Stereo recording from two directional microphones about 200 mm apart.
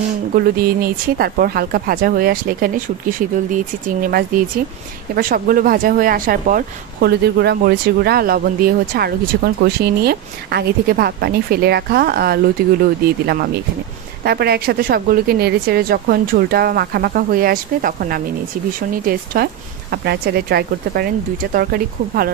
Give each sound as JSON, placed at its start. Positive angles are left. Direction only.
{"t": 0.4, "sound": "speech", "side_deg": -50}